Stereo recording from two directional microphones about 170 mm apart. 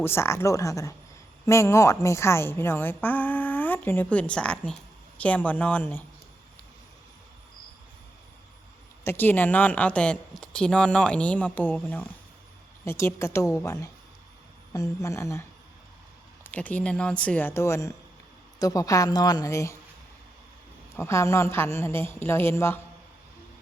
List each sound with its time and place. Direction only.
0.0 s a woman's voice: 15° left (ahead or behind)
9.0 s a woman's voice: 10° left (ahead or behind)
20.9 s a woman's voice: 15° left (ahead or behind)